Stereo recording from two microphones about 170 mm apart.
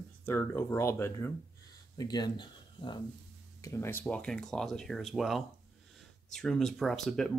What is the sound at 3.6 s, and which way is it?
Speech, 15° left (ahead or behind).